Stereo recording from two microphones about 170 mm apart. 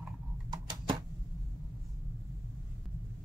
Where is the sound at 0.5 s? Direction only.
25° right (ahead or behind).